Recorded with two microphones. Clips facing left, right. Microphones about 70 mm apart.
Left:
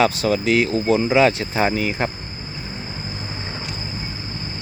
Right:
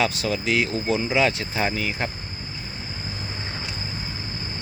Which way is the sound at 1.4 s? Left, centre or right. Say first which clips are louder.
Left 5 dB; left.